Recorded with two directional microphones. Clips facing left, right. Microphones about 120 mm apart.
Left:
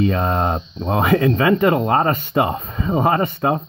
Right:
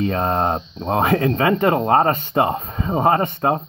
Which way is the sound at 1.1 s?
50° right (ahead or behind).